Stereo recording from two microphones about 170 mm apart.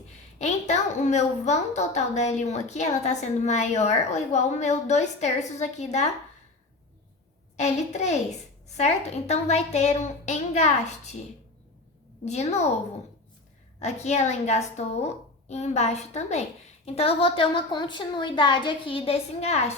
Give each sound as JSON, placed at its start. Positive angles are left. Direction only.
{"t": 0.3, "sound": "a woman's voice", "side_deg": 40}
{"t": 7.5, "sound": "a woman's voice", "side_deg": 40}
{"t": 12.2, "sound": "a woman's voice", "side_deg": 40}
{"t": 13.8, "sound": "a woman's voice", "side_deg": 40}